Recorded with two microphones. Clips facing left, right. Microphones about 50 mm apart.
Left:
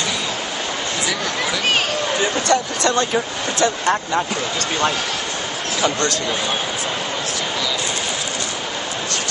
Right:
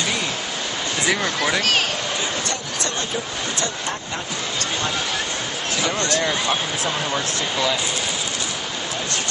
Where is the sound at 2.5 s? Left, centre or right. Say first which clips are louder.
Left 9 dB; left.